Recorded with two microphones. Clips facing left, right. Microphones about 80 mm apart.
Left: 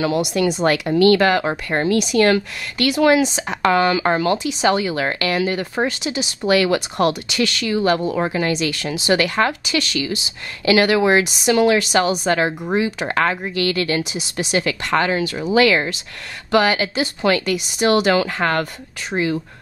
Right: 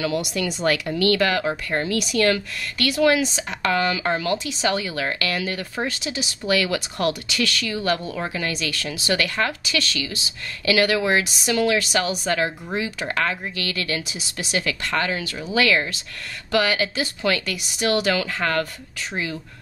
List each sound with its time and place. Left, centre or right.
0.0 s speech: left
1.4 s speech: left
4.4 s speech: centre
4.6 s speech: left